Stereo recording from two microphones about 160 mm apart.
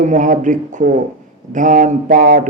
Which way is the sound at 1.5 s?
55° right (ahead or behind).